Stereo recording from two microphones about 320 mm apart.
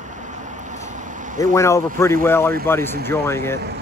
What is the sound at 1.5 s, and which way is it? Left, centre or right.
Speech, centre.